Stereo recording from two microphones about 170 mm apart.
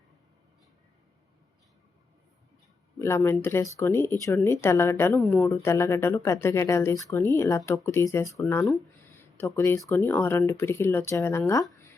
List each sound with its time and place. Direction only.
3.0 s speech: 15° left (ahead or behind)
9.1 s a sound: 15° left (ahead or behind)
9.9 s speech: 10° left (ahead or behind)